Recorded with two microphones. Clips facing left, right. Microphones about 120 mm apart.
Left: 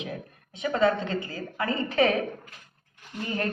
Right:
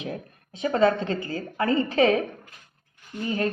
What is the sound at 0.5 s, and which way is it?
A woman's voice, 35° right (ahead or behind).